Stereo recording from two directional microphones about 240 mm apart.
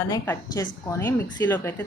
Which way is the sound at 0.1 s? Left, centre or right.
Centre.